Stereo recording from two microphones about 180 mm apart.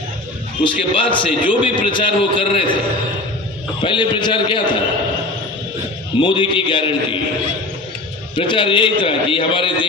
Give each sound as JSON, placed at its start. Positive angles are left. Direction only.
{"t": 0.6, "sound": "a man's voice", "side_deg": 25}
{"t": 3.8, "sound": "a man's voice", "side_deg": 25}
{"t": 6.1, "sound": "a man's voice", "side_deg": 25}
{"t": 8.4, "sound": "a man's voice", "side_deg": 25}